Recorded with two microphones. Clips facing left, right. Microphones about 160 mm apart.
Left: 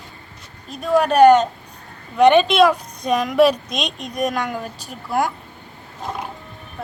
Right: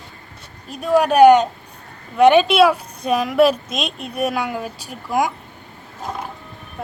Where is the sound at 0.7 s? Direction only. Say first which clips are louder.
Right 1 dB; 10° right (ahead or behind).